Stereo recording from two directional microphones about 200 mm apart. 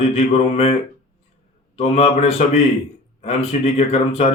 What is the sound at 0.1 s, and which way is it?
A man's voice, 30° left (ahead or behind).